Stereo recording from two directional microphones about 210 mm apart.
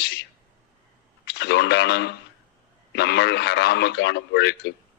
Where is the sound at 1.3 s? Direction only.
50° left (ahead or behind).